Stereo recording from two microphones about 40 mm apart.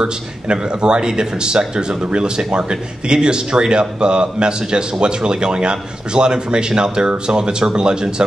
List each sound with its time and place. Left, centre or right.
0.0 s speech: right